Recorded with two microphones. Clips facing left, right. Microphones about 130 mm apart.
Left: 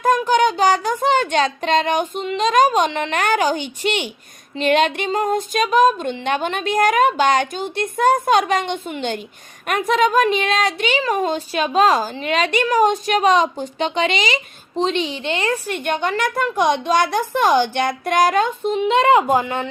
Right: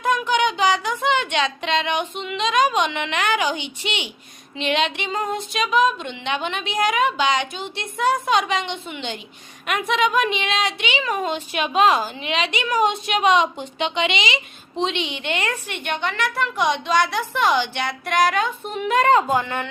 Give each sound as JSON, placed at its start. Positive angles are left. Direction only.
{"t": 0.0, "sound": "a woman's voice", "side_deg": 40}
{"t": 18.8, "sound": "speech", "side_deg": 25}